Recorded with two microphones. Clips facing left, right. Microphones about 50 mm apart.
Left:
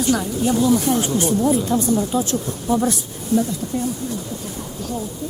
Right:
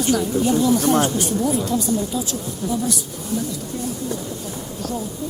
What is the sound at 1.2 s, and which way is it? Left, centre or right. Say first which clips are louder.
Speech: left 3 dB; left.